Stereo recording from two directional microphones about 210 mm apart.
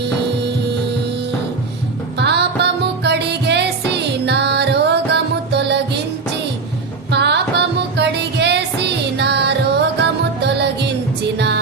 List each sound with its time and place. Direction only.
2.1 s music: 55° right (ahead or behind)
7.1 s music: 55° right (ahead or behind)